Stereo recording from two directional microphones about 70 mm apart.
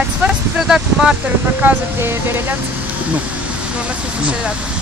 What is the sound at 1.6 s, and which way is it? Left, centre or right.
Speech, right.